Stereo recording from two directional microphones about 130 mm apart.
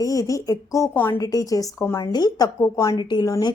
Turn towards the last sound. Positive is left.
turn(degrees=30)  # may be behind; listen again after turning